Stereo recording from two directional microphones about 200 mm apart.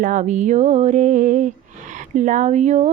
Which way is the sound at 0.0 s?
40° right (ahead or behind).